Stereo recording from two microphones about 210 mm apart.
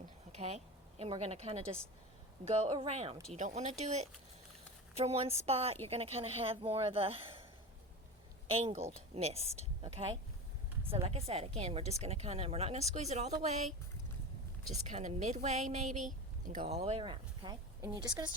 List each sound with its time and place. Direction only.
0.3 s a woman's voice: 30° right (ahead or behind)
8.5 s speech: 30° right (ahead or behind)
10.9 s speech: 30° right (ahead or behind)
14.8 s a woman's voice: 35° right (ahead or behind); by 18.3 s 15° right (ahead or behind)